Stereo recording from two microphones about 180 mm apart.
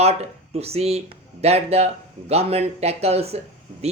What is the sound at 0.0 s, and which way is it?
Speech, 35° right (ahead or behind).